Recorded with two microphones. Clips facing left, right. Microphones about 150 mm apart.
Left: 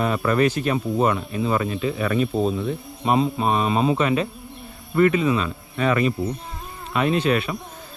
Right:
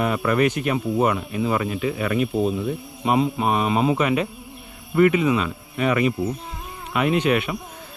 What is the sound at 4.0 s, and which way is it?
Speech, 30° left (ahead or behind).